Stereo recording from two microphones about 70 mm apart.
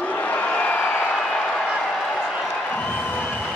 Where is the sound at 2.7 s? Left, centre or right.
Left.